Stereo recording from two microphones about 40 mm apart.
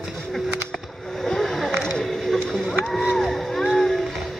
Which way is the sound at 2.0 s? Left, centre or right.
Centre.